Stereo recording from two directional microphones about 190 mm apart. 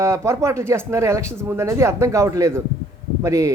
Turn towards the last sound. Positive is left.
turn(degrees=-15)  # may be behind; listen again after turning